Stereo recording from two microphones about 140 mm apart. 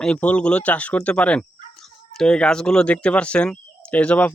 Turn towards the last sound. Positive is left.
turn(degrees=10)  # may be behind; listen again after turning